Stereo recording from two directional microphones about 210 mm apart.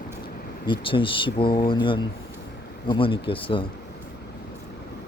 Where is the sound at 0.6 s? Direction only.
25° left (ahead or behind).